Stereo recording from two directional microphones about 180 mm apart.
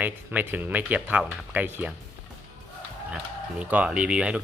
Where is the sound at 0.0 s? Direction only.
10° right (ahead or behind).